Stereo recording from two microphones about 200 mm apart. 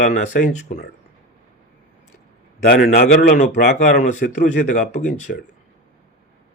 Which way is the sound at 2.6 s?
45° left (ahead or behind).